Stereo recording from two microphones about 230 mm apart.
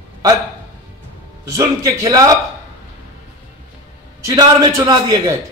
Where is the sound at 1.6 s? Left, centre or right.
Centre.